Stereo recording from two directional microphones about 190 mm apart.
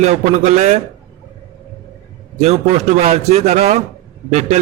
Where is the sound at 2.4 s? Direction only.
35° right (ahead or behind).